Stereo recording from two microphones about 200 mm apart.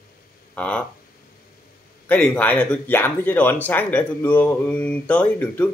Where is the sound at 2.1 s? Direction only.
5° left (ahead or behind).